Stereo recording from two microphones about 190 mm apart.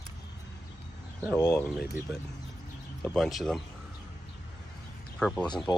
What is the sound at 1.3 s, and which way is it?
Speech, 15° left (ahead or behind).